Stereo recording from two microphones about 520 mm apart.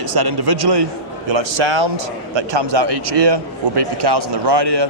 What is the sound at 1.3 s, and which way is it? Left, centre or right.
A man's voice, right.